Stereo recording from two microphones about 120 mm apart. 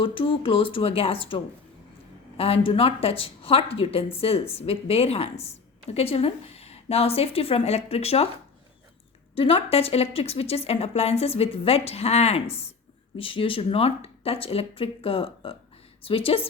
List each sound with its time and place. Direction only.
0.0 s speech: 45° left (ahead or behind)
2.4 s speech: 55° left (ahead or behind)
9.3 s speech: 55° left (ahead or behind)